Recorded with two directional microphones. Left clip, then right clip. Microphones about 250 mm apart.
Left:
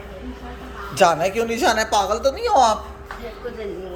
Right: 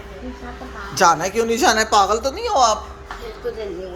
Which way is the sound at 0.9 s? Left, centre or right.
Centre.